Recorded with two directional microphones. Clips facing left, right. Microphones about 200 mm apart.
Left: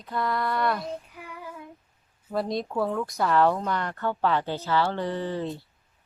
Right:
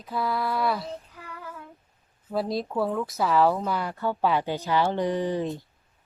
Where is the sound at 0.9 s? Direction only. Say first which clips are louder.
Left 2 dB; 10° left (ahead or behind).